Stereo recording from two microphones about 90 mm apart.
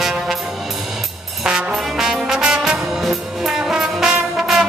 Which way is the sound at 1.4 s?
5° right (ahead or behind).